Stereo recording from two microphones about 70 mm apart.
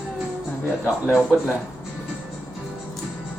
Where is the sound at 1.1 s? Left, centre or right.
Centre.